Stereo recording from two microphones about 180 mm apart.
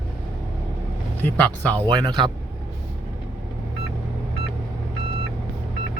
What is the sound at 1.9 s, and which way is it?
Speech, 25° right (ahead or behind).